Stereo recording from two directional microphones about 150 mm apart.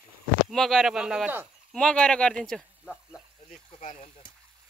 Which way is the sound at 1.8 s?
5° left (ahead or behind).